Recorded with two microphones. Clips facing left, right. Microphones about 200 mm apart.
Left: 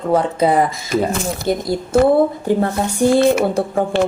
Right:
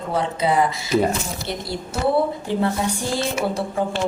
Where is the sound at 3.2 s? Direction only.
60° left (ahead or behind).